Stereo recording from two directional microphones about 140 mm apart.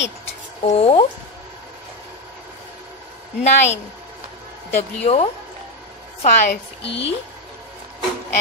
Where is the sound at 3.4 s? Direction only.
50° left (ahead or behind).